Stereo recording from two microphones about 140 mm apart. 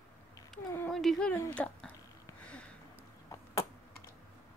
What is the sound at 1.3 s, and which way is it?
Speech, 10° left (ahead or behind).